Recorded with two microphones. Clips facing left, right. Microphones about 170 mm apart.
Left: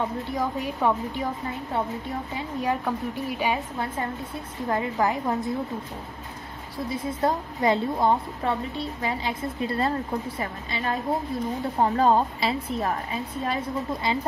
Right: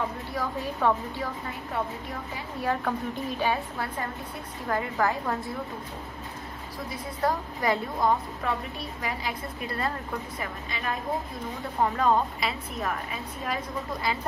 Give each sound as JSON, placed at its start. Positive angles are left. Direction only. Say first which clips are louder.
{"t": 0.3, "sound": "a woman's voice", "louder": "left 3 dB", "side_deg": 15}
{"t": 2.3, "sound": "a woman's voice", "louder": "left 2 dB", "side_deg": 15}
{"t": 6.9, "sound": "a woman's voice", "louder": "left 3 dB", "side_deg": 25}